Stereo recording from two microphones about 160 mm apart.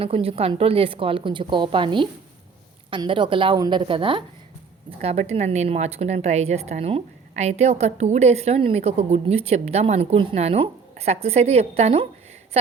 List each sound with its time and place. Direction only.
0.0 s a woman's voice: 35° right (ahead or behind)